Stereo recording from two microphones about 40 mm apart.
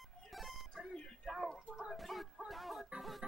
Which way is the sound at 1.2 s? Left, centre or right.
Centre.